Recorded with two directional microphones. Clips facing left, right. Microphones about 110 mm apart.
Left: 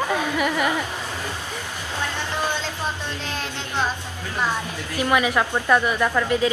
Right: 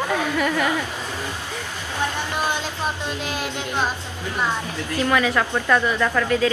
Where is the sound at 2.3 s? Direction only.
15° right (ahead or behind).